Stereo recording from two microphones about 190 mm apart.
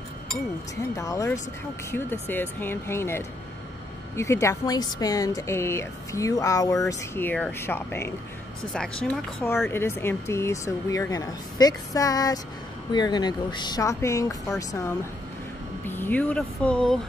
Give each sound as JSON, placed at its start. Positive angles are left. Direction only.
{"t": 0.9, "sound": "speech", "side_deg": 15}